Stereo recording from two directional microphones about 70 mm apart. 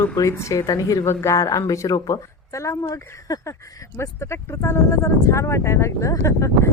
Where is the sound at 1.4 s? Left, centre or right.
Left.